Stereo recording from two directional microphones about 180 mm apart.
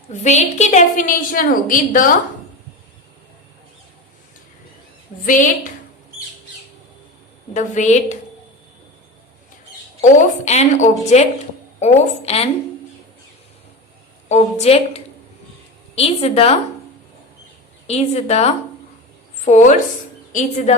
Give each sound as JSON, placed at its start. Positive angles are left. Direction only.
{"t": 0.1, "sound": "a woman's voice", "side_deg": 40}
{"t": 5.2, "sound": "a woman's voice", "side_deg": 45}
{"t": 7.5, "sound": "a woman's voice", "side_deg": 40}
{"t": 10.0, "sound": "a woman's voice", "side_deg": 40}
{"t": 14.3, "sound": "a woman's voice", "side_deg": 35}
{"t": 17.8, "sound": "a woman's voice", "side_deg": 35}